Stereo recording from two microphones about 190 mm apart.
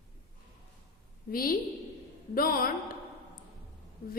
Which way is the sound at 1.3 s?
50° left (ahead or behind).